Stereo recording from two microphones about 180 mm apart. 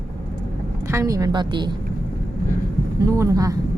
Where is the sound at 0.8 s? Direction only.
15° right (ahead or behind).